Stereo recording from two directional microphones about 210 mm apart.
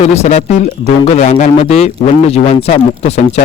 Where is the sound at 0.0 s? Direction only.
30° left (ahead or behind).